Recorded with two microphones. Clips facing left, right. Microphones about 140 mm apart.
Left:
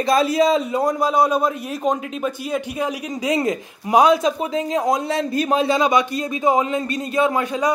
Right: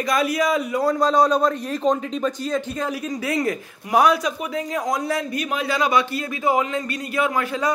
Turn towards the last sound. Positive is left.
turn(degrees=20)  # may be behind; listen again after turning